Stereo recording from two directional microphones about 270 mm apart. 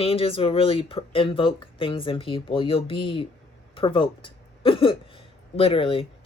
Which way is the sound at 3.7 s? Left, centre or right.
Centre.